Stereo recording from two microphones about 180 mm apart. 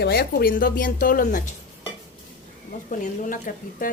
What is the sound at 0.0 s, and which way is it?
A woman's voice, 60° left (ahead or behind).